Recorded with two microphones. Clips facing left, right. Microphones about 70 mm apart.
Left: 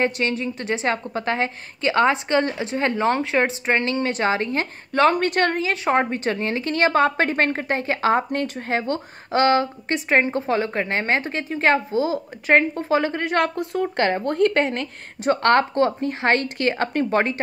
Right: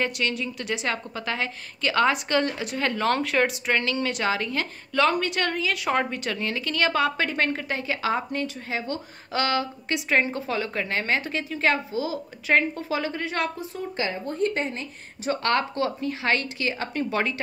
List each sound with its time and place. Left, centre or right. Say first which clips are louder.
0.0 s a woman's voice: left 5 dB; left
15.4 s a woman's voice: left 7 dB; left